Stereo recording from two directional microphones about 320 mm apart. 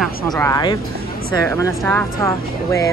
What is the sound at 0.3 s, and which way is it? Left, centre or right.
Speech, centre.